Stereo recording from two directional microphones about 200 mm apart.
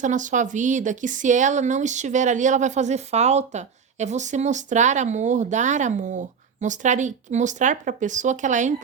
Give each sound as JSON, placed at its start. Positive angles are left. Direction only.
{"t": 0.0, "sound": "speech", "side_deg": -40}